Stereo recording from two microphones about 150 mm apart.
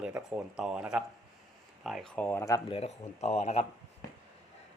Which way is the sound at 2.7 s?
45° left (ahead or behind).